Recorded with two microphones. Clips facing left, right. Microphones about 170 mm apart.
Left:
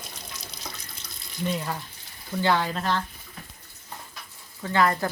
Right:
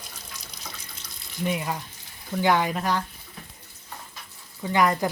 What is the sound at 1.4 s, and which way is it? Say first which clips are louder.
Speech: right 1 dB; 10° right (ahead or behind).